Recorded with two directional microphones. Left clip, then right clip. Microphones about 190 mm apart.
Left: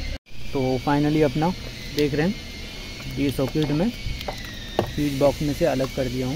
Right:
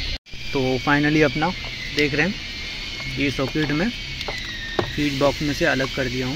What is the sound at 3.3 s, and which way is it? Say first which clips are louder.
Speech: right 1 dB; 15° left (ahead or behind).